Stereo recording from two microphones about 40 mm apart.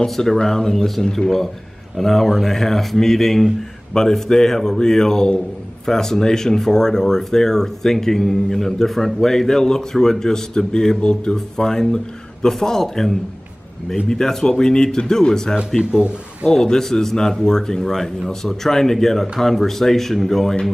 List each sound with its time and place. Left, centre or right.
0.0 s speech: centre